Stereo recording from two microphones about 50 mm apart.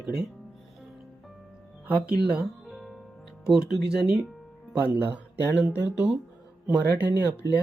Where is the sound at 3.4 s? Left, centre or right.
Centre.